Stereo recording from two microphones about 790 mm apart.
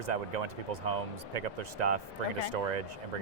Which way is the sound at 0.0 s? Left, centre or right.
Right.